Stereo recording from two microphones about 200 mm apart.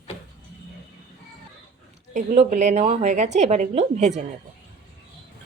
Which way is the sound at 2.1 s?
35° right (ahead or behind).